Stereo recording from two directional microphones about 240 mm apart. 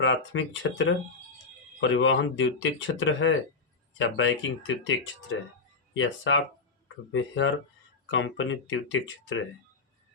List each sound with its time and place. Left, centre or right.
0.0 s speech: left